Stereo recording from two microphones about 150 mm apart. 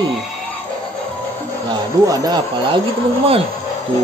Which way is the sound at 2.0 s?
25° right (ahead or behind).